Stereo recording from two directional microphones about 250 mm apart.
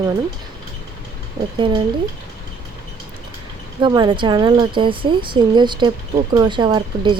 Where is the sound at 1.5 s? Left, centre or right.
Centre.